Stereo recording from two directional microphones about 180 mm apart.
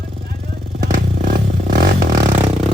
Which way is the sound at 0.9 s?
50° right (ahead or behind).